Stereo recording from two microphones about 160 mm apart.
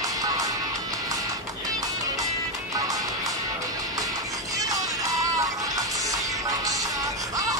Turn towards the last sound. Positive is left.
turn(degrees=-20)  # may be behind; listen again after turning